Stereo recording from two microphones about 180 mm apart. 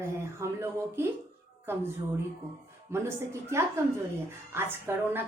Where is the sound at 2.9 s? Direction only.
15° right (ahead or behind).